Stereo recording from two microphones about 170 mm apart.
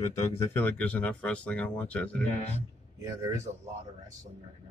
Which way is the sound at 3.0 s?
15° right (ahead or behind).